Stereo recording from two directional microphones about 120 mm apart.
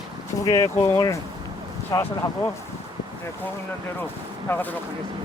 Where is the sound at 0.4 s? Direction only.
25° left (ahead or behind).